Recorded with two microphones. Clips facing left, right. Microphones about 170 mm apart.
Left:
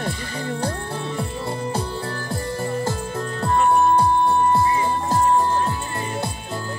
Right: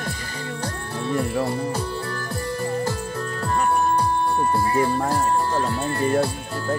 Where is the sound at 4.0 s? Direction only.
25° left (ahead or behind).